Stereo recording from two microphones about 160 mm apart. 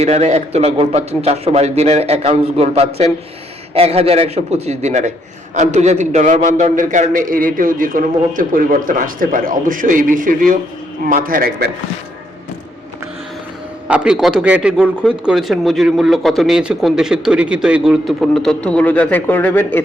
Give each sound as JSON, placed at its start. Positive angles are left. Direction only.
{"t": 0.0, "sound": "a man's voice", "side_deg": -40}
{"t": 13.8, "sound": "a man's voice", "side_deg": -5}